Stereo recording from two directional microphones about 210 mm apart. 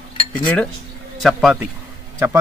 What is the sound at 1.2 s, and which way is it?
Speech, centre (ahead or behind).